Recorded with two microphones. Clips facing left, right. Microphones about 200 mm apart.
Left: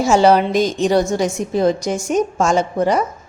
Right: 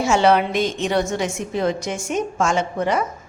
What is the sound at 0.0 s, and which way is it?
A woman's voice, 35° left (ahead or behind).